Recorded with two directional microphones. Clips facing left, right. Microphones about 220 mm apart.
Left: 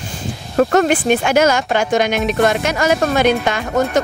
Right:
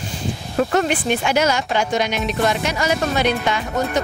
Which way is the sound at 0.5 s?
45° left (ahead or behind).